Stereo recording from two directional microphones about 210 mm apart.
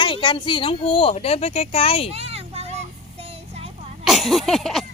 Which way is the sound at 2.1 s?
30° right (ahead or behind).